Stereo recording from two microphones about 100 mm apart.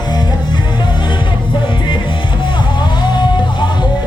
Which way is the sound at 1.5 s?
55° left (ahead or behind).